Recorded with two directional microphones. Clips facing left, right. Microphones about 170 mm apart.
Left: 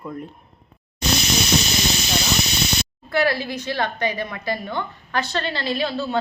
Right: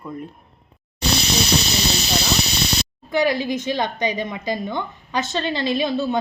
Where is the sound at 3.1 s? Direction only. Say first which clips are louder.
Right 2 dB; 15° right (ahead or behind).